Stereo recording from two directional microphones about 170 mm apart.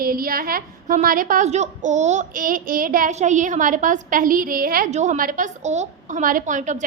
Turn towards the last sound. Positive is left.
turn(degrees=-45)  # may be behind; listen again after turning